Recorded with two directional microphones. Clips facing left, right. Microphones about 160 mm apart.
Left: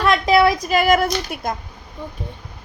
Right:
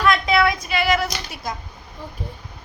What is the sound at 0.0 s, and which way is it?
A woman's voice, 35° left (ahead or behind).